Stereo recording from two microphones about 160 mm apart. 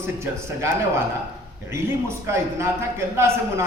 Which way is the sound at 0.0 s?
15° right (ahead or behind).